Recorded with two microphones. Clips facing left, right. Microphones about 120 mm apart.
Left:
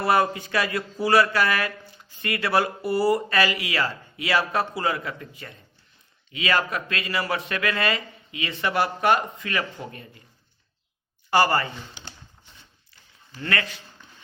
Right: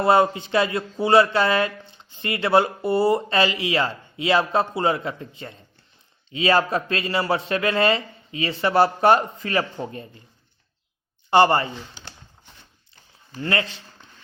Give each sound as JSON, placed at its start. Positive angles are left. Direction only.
{"t": 0.0, "sound": "speech", "side_deg": -25}
{"t": 11.3, "sound": "speech", "side_deg": -25}
{"t": 12.0, "sound": "a sound", "side_deg": 15}
{"t": 13.4, "sound": "speech", "side_deg": -25}